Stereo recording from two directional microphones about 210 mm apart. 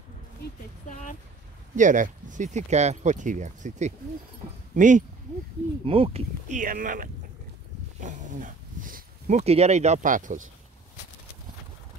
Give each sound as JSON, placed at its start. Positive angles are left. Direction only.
{"t": 0.4, "sound": "speech", "side_deg": 35}
{"t": 1.8, "sound": "speech", "side_deg": -35}
{"t": 5.9, "sound": "speech", "side_deg": -25}